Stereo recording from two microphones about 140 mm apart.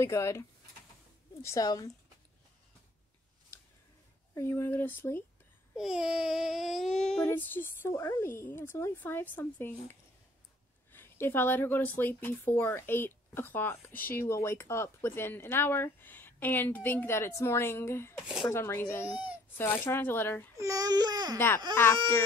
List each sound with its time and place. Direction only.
0.0 s a woman's voice: 20° left (ahead or behind)
4.4 s speech: 20° left (ahead or behind)
5.8 s a child's voice: 5° right (ahead or behind)
7.2 s speech: 15° left (ahead or behind)
18.2 s a child's voice: 5° right (ahead or behind)
18.5 s speech: 15° left (ahead or behind)
20.5 s speech: 25° right (ahead or behind)
21.8 s speech: 15° left (ahead or behind)